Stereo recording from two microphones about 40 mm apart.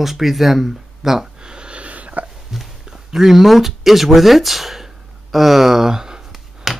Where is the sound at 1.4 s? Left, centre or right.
Right.